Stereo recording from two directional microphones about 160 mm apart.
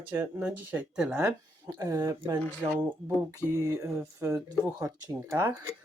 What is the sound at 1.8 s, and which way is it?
Speech, 20° right (ahead or behind).